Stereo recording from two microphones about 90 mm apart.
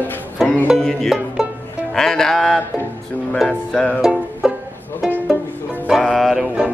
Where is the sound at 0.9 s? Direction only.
Centre (ahead or behind).